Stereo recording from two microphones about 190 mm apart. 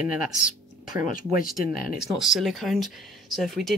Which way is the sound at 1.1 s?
50° left (ahead or behind).